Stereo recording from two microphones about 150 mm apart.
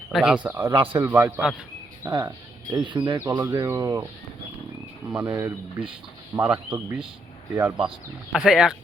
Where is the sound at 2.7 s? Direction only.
30° right (ahead or behind).